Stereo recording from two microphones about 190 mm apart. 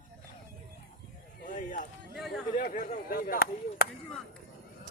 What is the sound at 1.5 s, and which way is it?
Run, 40° left (ahead or behind).